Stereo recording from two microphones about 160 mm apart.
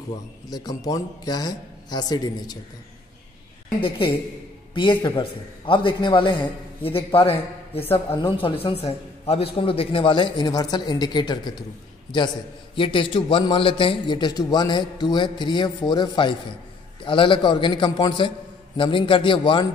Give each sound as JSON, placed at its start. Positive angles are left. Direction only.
{"t": 0.5, "sound": "a man's voice", "side_deg": 25}
{"t": 4.7, "sound": "a man's voice", "side_deg": 30}
{"t": 12.7, "sound": "a man's voice", "side_deg": 35}